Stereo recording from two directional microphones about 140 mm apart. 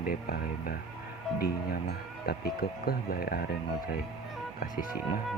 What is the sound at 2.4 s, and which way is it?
Speech, 90° left.